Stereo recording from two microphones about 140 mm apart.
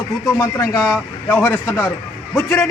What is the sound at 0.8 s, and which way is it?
Speech, 5° right (ahead or behind).